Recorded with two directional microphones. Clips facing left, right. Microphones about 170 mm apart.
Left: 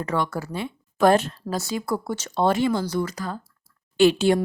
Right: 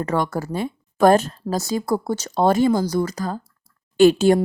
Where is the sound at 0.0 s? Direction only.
45° right (ahead or behind).